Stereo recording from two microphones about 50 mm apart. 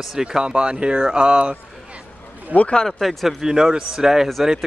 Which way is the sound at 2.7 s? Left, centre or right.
Centre.